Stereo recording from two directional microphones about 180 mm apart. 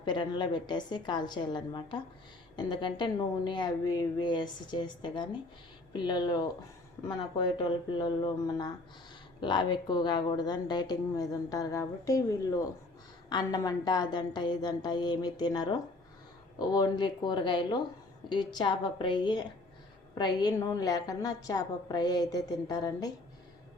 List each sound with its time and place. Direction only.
0.0 s a woman's voice: 25° left (ahead or behind)